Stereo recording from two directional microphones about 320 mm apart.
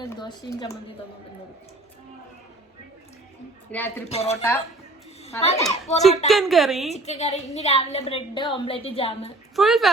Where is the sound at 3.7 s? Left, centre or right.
Centre.